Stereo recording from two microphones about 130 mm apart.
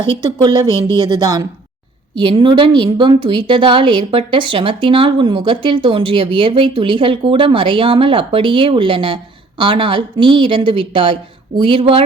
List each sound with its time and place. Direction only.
0.2 s a woman's voice: 35° right (ahead or behind)